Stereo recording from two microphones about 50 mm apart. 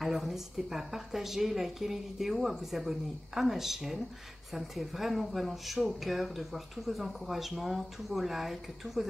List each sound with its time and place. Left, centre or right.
0.0 s speech: centre